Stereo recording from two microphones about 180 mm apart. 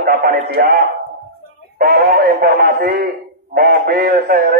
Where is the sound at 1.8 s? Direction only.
55° right (ahead or behind).